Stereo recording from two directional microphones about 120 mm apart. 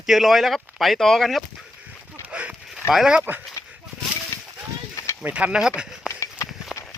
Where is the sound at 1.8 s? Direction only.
10° right (ahead or behind).